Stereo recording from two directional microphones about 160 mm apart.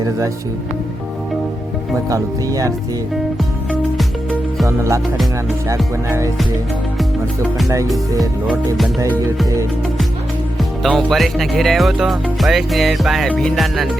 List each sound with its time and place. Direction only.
2.0 s music: 20° right (ahead or behind)
3.7 s music: 5° right (ahead or behind)
5.6 s music: 20° right (ahead or behind)
10.6 s speech: centre (ahead or behind)